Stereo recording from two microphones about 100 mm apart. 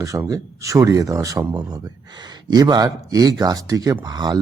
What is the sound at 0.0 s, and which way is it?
Speech, 35° right (ahead or behind).